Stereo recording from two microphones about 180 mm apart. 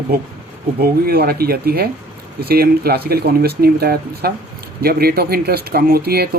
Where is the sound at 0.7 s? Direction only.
60° right (ahead or behind).